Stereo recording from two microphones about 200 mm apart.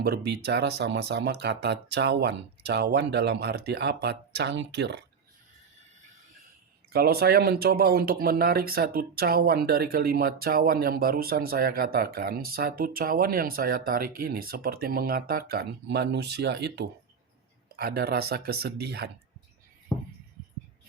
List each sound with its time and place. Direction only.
0.0 s speech: 50° right (ahead or behind)
6.9 s speech: 50° right (ahead or behind)